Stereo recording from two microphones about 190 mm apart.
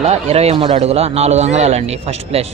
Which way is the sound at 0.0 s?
35° right (ahead or behind).